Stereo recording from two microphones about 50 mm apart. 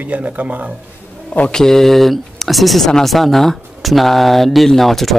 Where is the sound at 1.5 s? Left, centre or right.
Centre.